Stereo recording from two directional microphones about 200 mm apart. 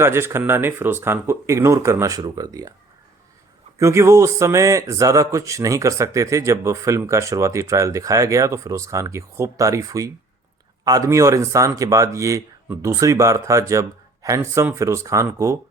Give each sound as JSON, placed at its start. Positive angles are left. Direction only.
{"t": 0.0, "sound": "speech", "side_deg": -10}
{"t": 3.8, "sound": "speech", "side_deg": -15}